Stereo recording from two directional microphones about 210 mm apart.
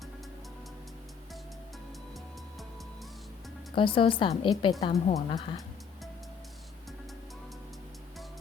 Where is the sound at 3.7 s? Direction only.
25° left (ahead or behind).